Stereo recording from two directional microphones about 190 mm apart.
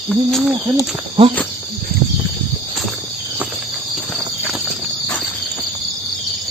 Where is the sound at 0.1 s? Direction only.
Centre (ahead or behind).